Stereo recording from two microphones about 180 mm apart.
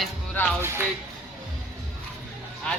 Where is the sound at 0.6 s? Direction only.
15° right (ahead or behind).